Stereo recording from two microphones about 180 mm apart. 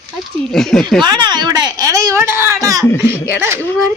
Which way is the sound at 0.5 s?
5° left (ahead or behind).